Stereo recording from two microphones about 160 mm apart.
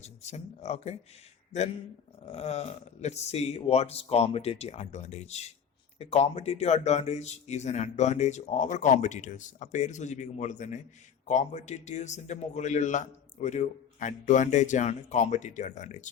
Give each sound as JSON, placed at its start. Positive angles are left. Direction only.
{"t": 0.0, "sound": "speech", "side_deg": 45}
{"t": 2.2, "sound": "speech", "side_deg": 40}